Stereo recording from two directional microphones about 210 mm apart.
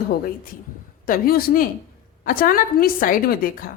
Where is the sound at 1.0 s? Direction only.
45° left (ahead or behind).